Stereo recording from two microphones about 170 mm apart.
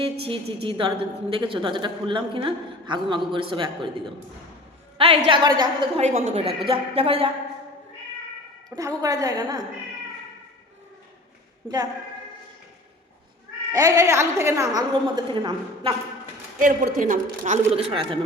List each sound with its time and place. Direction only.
0.0 s a woman's voice: 30° right (ahead or behind)
4.9 s a woman's voice: 35° right (ahead or behind)
6.0 s a woman's voice: 40° right (ahead or behind)
8.7 s a woman's voice: 20° right (ahead or behind)
11.6 s a woman's voice: 10° right (ahead or behind)
13.7 s a woman's voice: 20° right (ahead or behind)
16.6 s a woman's voice: 50° right (ahead or behind)